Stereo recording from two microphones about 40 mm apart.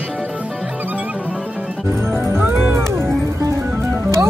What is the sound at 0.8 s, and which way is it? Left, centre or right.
Music, right.